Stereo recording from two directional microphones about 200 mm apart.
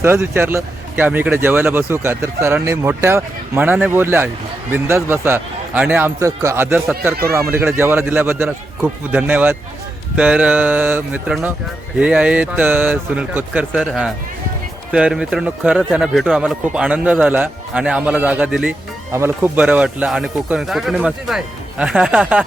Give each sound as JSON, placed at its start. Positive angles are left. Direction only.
{"t": 0.2, "sound": "speech", "side_deg": -10}